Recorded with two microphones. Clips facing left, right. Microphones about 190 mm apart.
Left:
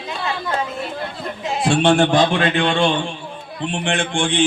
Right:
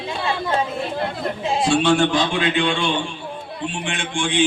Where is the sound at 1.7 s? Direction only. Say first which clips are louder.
Left 3 dB; 55° left (ahead or behind).